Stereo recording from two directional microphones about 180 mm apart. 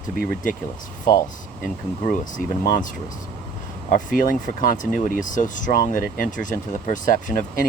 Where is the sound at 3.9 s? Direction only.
50° left (ahead or behind).